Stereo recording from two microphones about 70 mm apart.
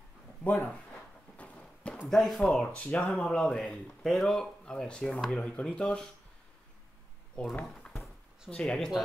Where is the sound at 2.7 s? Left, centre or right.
Left.